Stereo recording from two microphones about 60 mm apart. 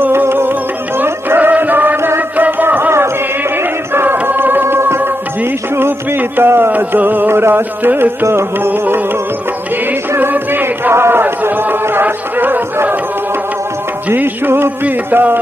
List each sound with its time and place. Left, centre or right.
0.0 s music: right
2.0 s music: right
2.3 s music: right
3.9 s music: right
6.7 s carnatic music: right
10.1 s music: right
14.0 s carnatic music: right